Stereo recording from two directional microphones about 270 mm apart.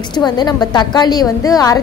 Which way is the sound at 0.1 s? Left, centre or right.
Centre.